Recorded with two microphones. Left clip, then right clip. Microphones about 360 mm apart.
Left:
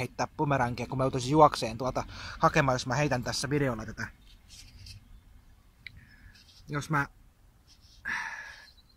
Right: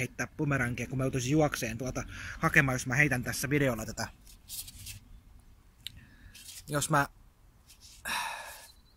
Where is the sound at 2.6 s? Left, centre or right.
Centre.